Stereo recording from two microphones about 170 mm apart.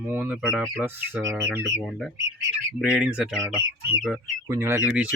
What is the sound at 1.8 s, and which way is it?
Speech, centre (ahead or behind).